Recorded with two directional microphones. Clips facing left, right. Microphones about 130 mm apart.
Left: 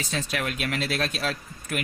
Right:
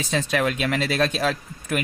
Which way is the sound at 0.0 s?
90° right.